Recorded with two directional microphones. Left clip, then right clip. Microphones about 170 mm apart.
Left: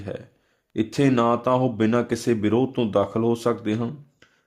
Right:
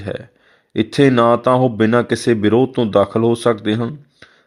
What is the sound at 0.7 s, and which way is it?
Speech, 25° right (ahead or behind).